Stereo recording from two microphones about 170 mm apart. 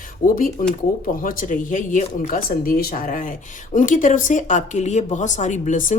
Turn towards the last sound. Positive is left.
turn(degrees=50)  # may be behind; listen again after turning